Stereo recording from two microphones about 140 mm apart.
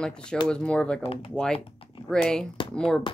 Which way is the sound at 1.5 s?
40° left (ahead or behind).